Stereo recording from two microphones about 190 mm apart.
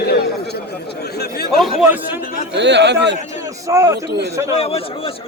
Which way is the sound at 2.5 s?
65° right (ahead or behind).